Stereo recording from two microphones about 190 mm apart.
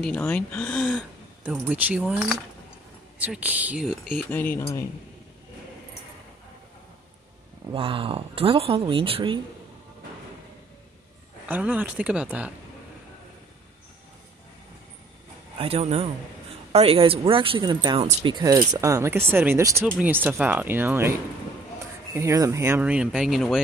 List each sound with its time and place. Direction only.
0.0 s speech: 10° left (ahead or behind)
0.9 s speech: 5° right (ahead or behind)
4.2 s speech: 10° left (ahead or behind)
7.7 s speech: 30° right (ahead or behind)
11.4 s speech: 10° right (ahead or behind)
15.5 s speech: 30° right (ahead or behind); by 21.1 s 10° right (ahead or behind)
22.1 s speech: 15° right (ahead or behind)